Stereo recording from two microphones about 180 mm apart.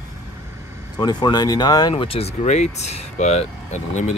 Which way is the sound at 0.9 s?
20° left (ahead or behind).